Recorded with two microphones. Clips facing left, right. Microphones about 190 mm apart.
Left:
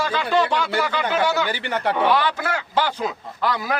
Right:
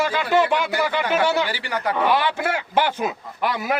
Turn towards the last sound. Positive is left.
turn(degrees=-20)  # may be behind; listen again after turning